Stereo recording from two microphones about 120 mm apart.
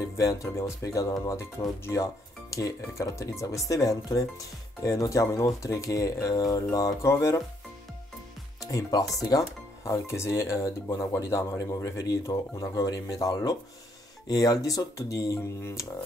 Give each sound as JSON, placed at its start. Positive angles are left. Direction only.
{"t": 0.2, "sound": "speech", "side_deg": 25}
{"t": 8.5, "sound": "speech", "side_deg": 30}